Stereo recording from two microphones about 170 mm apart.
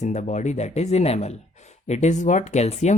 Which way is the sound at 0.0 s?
45° left (ahead or behind).